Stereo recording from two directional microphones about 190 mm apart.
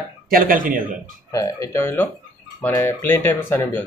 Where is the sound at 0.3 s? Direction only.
45° right (ahead or behind).